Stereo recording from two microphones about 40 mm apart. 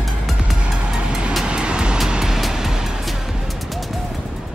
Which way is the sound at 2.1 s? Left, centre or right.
Centre.